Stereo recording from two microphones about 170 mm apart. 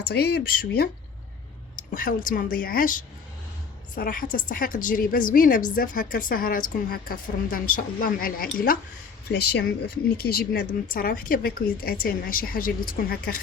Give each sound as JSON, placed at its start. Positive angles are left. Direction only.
{"t": 0.0, "sound": "speech", "side_deg": 70}
{"t": 1.7, "sound": "a woman's voice", "side_deg": 55}
{"t": 9.3, "sound": "a woman's voice", "side_deg": 75}